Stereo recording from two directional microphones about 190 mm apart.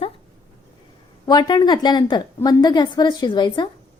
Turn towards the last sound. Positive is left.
turn(degrees=20)  # may be behind; listen again after turning